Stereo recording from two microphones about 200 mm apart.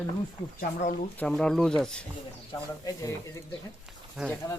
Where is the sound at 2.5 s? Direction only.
15° left (ahead or behind).